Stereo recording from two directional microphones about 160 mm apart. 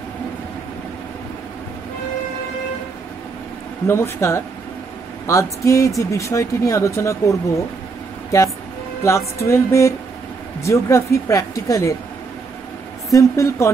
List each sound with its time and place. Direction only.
3.8 s speech: 15° left (ahead or behind)
13.1 s speech: 20° left (ahead or behind)